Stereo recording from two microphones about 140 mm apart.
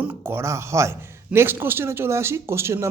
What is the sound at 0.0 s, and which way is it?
A man's voice, 15° right (ahead or behind).